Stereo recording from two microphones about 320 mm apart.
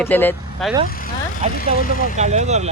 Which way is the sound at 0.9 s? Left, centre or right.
Left.